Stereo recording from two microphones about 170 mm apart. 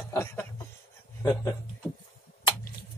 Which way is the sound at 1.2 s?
20° left (ahead or behind).